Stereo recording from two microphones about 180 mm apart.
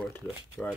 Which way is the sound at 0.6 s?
5° left (ahead or behind).